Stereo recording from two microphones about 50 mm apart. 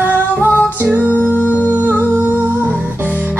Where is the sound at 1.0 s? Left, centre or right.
Right.